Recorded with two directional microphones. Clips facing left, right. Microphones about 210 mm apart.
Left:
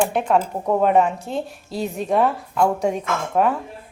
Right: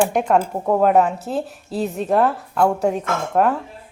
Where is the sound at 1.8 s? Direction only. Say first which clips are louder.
Right 1 dB; centre (ahead or behind).